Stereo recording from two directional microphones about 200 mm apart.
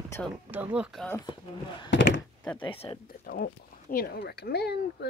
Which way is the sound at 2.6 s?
25° left (ahead or behind).